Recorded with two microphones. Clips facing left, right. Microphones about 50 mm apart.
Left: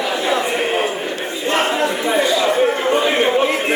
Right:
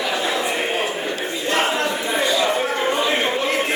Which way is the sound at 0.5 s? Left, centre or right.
Left.